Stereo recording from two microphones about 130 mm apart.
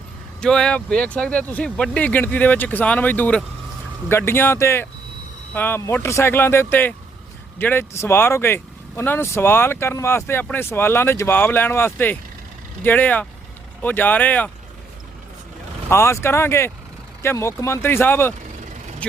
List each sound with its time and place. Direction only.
0.3 s speech: 5° left (ahead or behind)
15.9 s speech: 20° left (ahead or behind)